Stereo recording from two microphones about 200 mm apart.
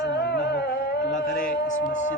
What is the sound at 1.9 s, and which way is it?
Speech, 35° left (ahead or behind).